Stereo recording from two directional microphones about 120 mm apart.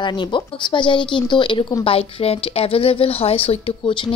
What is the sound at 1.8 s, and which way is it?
A woman's voice, 55° left (ahead or behind).